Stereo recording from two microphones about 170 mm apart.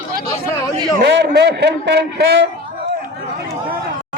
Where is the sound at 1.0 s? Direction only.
80° right.